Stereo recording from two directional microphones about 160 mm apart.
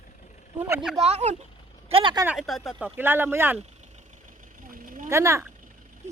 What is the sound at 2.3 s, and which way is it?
Speech, centre (ahead or behind).